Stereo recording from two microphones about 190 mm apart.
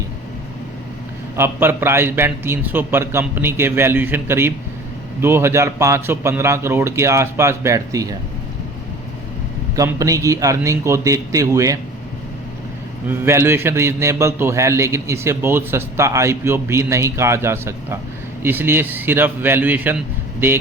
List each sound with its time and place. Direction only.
1.4 s a man's voice: 10° right (ahead or behind)
9.7 s a man's voice: 15° right (ahead or behind)
13.1 s a man's voice: 15° right (ahead or behind)